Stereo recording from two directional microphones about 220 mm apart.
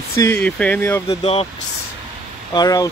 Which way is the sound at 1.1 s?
25° left (ahead or behind).